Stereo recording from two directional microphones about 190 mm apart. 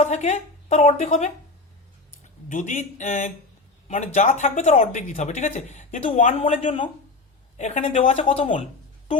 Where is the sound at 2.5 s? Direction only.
40° left (ahead or behind).